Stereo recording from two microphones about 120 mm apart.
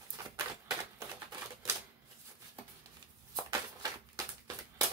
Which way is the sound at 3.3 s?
30° right (ahead or behind).